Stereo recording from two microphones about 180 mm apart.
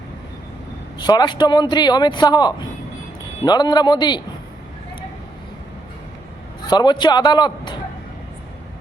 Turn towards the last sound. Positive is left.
turn(degrees=25)  # may be behind; listen again after turning